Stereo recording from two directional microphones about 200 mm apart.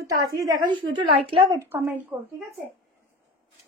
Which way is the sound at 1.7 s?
10° right (ahead or behind).